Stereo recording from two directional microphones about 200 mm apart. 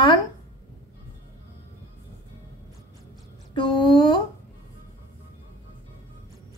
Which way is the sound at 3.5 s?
25° left (ahead or behind).